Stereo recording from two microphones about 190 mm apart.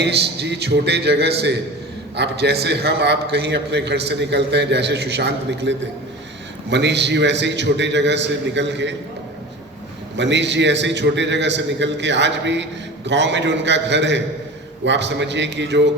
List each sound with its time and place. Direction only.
0.0 s a man's voice: 65° right (ahead or behind)
10.2 s a man's voice: 70° right (ahead or behind)